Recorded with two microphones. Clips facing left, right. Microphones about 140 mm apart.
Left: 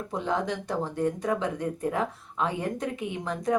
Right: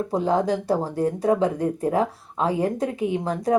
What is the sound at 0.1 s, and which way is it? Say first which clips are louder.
Speech: right 6 dB; 35° right (ahead or behind).